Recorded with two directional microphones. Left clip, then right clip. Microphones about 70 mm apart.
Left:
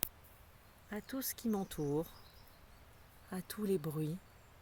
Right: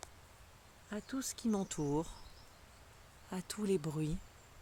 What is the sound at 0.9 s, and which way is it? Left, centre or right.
Speech, centre.